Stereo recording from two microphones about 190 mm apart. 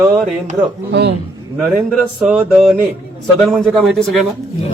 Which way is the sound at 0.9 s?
65° right (ahead or behind).